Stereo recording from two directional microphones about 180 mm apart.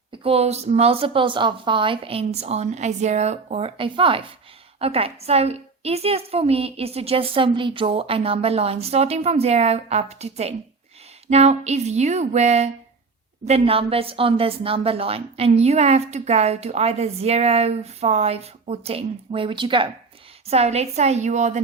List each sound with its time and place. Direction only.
0.2 s a woman's voice: 35° right (ahead or behind)